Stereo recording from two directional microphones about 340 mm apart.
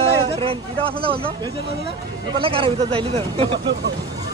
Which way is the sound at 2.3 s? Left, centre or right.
Centre.